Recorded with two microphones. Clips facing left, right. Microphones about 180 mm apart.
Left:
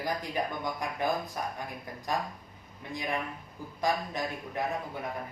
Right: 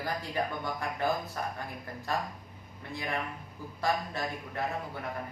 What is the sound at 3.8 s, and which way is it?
Speech, 15° left (ahead or behind).